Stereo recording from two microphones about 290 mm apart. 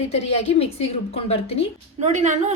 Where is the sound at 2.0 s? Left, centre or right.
Right.